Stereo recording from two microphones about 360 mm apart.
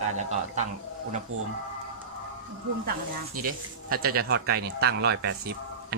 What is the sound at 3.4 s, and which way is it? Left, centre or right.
Speech, right.